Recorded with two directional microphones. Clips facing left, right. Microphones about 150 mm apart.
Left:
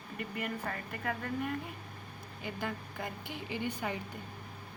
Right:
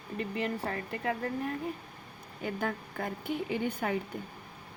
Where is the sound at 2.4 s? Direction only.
50° right (ahead or behind).